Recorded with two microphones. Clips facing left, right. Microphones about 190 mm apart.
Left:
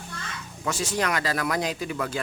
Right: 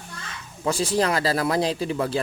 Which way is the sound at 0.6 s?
30° right (ahead or behind).